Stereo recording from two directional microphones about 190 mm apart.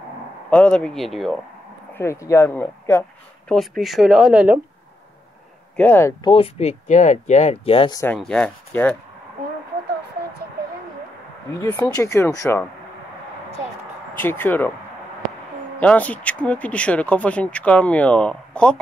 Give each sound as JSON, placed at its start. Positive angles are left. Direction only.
{"t": 0.5, "sound": "speech", "side_deg": 5}
{"t": 2.0, "sound": "speech", "side_deg": 15}
{"t": 3.5, "sound": "speech", "side_deg": 0}
{"t": 5.8, "sound": "speech", "side_deg": 10}
{"t": 6.2, "sound": "speech", "side_deg": 30}
{"t": 8.0, "sound": "speech", "side_deg": 5}
{"t": 11.6, "sound": "speech", "side_deg": 15}
{"t": 14.1, "sound": "speech", "side_deg": 10}
{"t": 15.8, "sound": "speech", "side_deg": 5}